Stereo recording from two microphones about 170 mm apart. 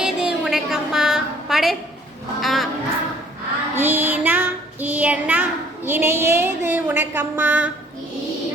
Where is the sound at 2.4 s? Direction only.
Centre (ahead or behind).